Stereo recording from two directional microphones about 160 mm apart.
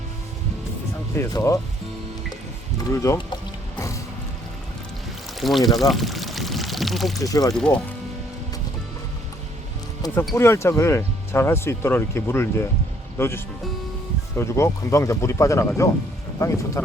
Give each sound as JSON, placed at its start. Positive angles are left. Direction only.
{"t": 1.1, "sound": "speech", "side_deg": 15}
{"t": 2.9, "sound": "speech", "side_deg": 20}
{"t": 5.4, "sound": "speech", "side_deg": 0}
{"t": 5.9, "sound": "pour", "side_deg": 0}
{"t": 7.2, "sound": "speech", "side_deg": 20}
{"t": 7.5, "sound": "speech", "side_deg": 5}
{"t": 10.3, "sound": "speech", "side_deg": 15}